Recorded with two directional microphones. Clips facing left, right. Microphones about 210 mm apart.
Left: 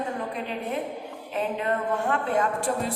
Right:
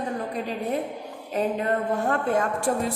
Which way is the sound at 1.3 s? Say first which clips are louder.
Right 3 dB; 40° right (ahead or behind).